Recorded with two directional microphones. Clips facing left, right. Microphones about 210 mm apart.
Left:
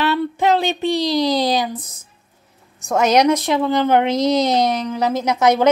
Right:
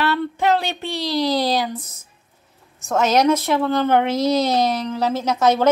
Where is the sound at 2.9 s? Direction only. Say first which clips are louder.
Left 2 dB; 15° left (ahead or behind).